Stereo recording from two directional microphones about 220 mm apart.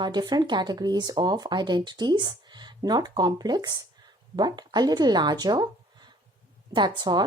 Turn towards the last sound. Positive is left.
turn(degrees=-20)  # may be behind; listen again after turning